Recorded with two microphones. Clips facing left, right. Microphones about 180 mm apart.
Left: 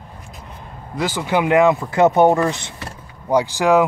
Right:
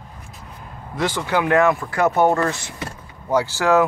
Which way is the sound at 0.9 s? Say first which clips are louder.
Even; centre (ahead or behind).